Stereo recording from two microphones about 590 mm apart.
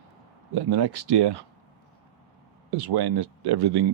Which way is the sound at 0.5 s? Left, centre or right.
Right.